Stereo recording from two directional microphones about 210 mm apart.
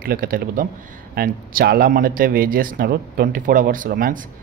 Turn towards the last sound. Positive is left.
turn(degrees=-40)  # may be behind; listen again after turning